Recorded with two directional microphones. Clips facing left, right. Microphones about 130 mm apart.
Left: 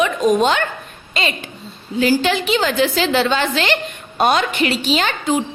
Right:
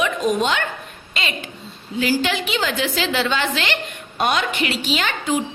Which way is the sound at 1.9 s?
35° left (ahead or behind).